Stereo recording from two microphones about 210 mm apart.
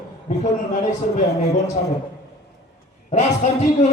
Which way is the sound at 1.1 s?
35° left (ahead or behind).